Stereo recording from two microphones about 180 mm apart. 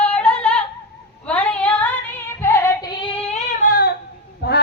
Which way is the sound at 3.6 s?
55° left (ahead or behind).